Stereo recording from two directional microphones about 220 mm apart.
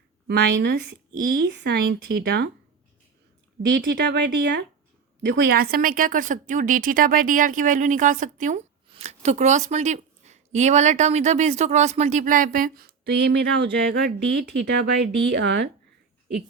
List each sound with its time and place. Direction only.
0.3 s speech: 50° right (ahead or behind)
3.8 s a woman's voice: 50° right (ahead or behind)